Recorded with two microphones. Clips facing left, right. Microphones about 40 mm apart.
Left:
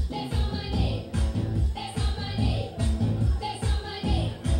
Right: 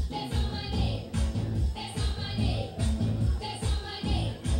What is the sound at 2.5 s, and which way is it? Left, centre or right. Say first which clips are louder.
Music: left 2 dB; centre.